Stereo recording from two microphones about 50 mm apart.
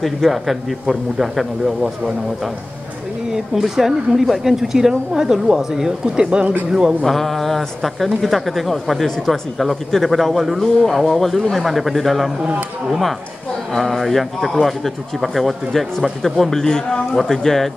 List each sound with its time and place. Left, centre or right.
0.0 s a man's voice: centre
7.0 s a man's voice: centre
13.7 s a man's voice: centre